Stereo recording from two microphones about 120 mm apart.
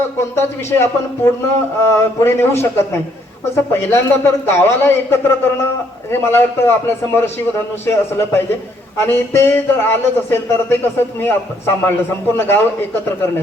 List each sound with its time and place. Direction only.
0.3 s a man's voice: 20° left (ahead or behind)